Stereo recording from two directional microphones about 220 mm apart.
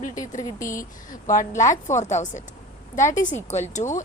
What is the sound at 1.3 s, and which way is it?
Speech, 35° left (ahead or behind).